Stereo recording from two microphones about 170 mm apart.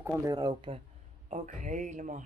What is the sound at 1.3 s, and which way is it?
Speech, 45° right (ahead or behind).